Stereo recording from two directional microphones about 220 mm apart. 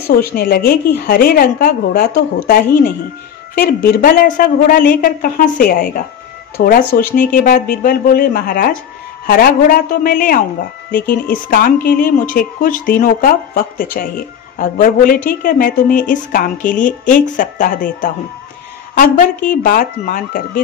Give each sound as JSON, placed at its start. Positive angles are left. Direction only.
{"t": 0.1, "sound": "a woman's voice", "side_deg": 45}